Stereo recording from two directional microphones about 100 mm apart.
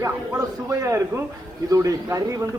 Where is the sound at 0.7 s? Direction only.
30° right (ahead or behind).